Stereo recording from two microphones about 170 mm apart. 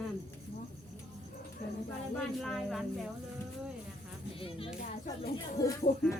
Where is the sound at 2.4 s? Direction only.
Centre (ahead or behind).